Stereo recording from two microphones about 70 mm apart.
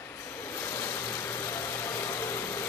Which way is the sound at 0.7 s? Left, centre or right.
Left.